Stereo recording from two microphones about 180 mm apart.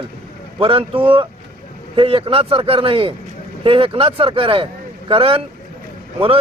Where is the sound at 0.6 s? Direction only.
30° right (ahead or behind).